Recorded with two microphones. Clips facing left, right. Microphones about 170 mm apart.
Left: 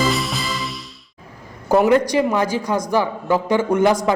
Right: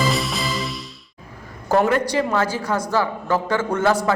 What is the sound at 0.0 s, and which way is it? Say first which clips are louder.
Music: left 1 dB; centre (ahead or behind).